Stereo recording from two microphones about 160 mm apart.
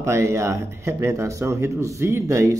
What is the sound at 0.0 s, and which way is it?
Speech, 20° right (ahead or behind).